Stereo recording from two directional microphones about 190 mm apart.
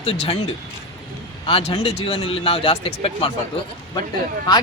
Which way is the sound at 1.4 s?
30° left (ahead or behind).